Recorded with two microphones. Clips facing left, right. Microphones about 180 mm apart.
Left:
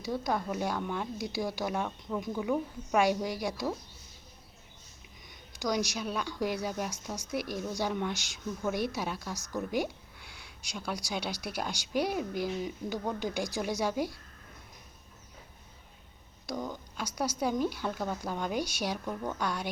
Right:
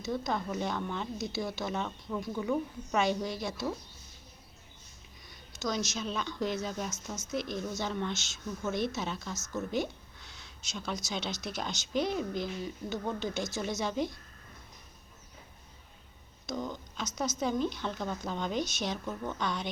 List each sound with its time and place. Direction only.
0.0 s a woman's voice: 10° left (ahead or behind)
5.5 s a woman's voice: 15° left (ahead or behind)
16.5 s a woman's voice: 10° left (ahead or behind)